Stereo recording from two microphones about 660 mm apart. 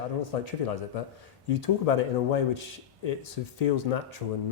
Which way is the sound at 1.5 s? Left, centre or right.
Left.